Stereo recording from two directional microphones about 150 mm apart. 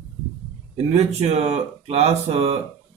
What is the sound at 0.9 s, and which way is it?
Speech, 45° right (ahead or behind).